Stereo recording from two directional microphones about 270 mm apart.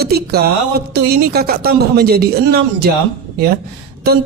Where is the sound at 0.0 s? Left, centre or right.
Right.